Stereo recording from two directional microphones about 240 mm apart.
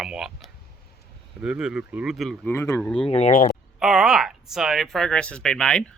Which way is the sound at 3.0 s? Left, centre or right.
Left.